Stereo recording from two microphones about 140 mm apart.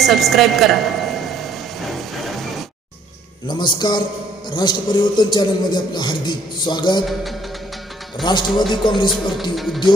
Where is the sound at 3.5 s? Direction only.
30° left (ahead or behind).